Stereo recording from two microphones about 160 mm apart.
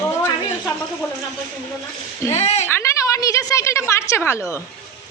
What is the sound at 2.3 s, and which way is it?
Speech, 45° left (ahead or behind).